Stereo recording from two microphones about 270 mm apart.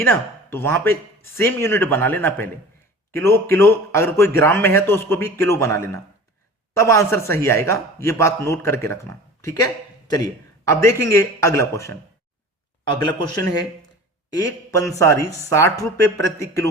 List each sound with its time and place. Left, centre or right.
0.0 s a man's voice: centre
10.7 s a man's voice: centre
14.9 s a man's voice: centre